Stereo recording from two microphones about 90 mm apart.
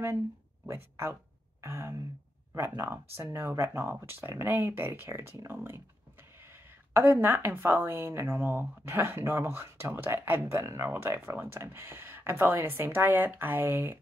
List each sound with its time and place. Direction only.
0.7 s speech: 30° right (ahead or behind)
6.9 s speech: 25° right (ahead or behind)